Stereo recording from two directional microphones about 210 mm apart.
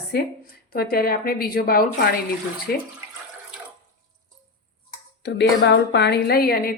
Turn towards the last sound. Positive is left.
turn(degrees=45)  # may be behind; listen again after turning